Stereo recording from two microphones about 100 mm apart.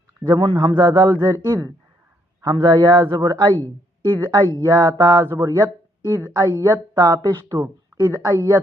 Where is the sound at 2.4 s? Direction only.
50° right (ahead or behind).